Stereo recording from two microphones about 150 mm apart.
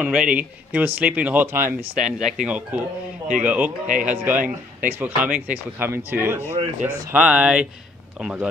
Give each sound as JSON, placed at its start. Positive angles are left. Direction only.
{"t": 0.0, "sound": "speech", "side_deg": -10}
{"t": 3.8, "sound": "speech", "side_deg": -60}
{"t": 4.1, "sound": "speech", "side_deg": -15}